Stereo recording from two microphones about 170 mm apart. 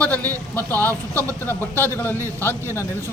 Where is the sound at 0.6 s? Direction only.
10° left (ahead or behind).